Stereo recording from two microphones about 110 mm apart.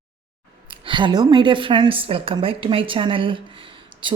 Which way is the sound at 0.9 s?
45° right (ahead or behind).